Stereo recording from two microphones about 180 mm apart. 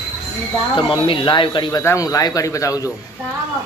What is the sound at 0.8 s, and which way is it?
Speech, 30° left (ahead or behind).